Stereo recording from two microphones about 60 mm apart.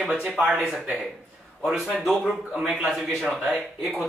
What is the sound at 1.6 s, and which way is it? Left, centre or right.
Speech, centre.